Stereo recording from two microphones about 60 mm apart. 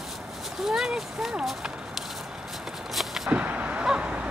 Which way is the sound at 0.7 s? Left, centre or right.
Centre.